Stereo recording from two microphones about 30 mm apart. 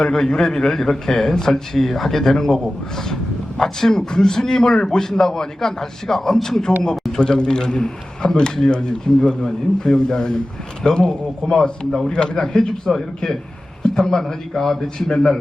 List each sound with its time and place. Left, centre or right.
0.0 s a man's voice: left
3.6 s a man's voice: centre
12.8 s a man's voice: centre
14.9 s a man's voice: left